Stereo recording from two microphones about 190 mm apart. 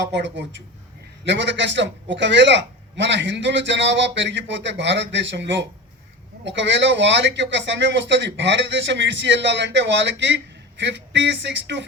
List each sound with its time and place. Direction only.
0.0 s a man's voice: 70° right (ahead or behind)